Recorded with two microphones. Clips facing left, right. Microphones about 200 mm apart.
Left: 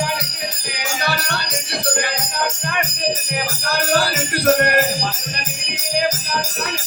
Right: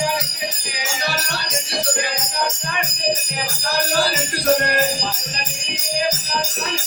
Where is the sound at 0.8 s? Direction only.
60° left (ahead or behind).